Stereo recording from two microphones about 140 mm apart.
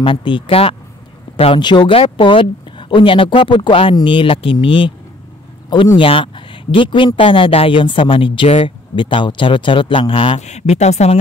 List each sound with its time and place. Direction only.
0.0 s speech: 35° left (ahead or behind)
10.4 s speech: 55° left (ahead or behind)